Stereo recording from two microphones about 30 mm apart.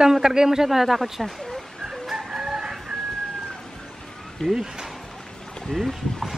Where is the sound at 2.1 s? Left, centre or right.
Right.